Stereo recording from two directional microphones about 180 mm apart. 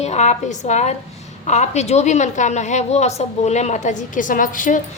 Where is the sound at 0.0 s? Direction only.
40° left (ahead or behind).